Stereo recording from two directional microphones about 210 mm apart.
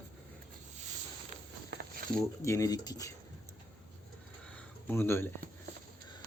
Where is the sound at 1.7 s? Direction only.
50° right (ahead or behind).